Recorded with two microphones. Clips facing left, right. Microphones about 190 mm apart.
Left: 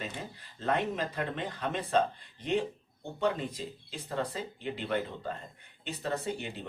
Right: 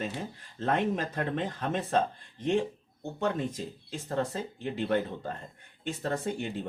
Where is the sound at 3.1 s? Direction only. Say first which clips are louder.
Right 1 dB; 45° right (ahead or behind).